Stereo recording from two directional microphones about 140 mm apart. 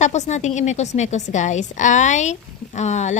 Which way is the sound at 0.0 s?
55° left (ahead or behind).